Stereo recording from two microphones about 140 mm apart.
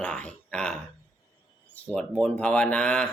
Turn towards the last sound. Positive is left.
turn(degrees=5)  # may be behind; listen again after turning